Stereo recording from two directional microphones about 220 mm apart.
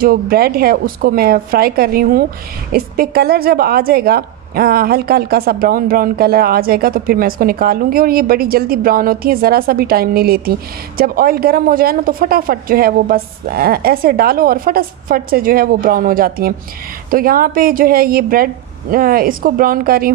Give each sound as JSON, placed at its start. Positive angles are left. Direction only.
{"t": 0.0, "sound": "a woman's voice", "side_deg": -40}